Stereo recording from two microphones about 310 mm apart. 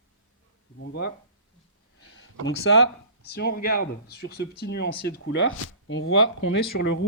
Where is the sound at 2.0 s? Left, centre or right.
Left.